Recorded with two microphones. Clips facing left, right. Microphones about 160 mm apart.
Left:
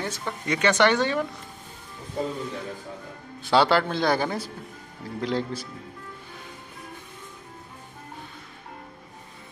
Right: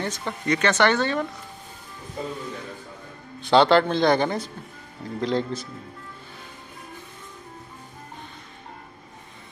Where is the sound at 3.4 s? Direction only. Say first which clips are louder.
Right 3 dB; 5° left (ahead or behind).